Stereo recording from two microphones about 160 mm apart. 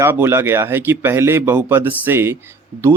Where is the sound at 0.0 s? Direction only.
15° right (ahead or behind).